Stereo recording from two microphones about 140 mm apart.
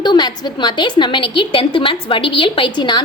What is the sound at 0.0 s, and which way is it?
A woman's voice, 30° left (ahead or behind).